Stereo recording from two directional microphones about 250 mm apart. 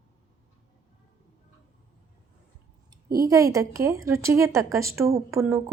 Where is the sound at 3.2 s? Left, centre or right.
Centre.